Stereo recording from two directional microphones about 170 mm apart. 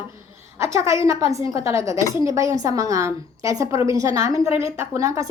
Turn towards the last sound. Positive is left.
turn(degrees=-20)  # may be behind; listen again after turning